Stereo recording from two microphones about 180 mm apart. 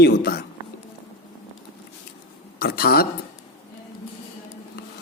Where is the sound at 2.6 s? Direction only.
55° left (ahead or behind).